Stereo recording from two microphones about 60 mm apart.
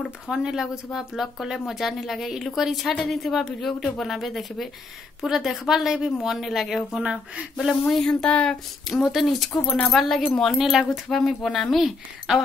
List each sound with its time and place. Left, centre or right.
0.3 s a woman's voice: centre
6.9 s speech: centre
8.0 s speech: centre
8.8 s speech: centre